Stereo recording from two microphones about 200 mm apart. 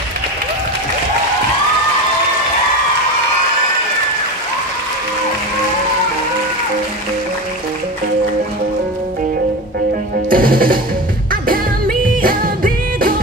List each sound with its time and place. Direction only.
10.3 s music: 45° right (ahead or behind)
12.2 s music: 45° right (ahead or behind)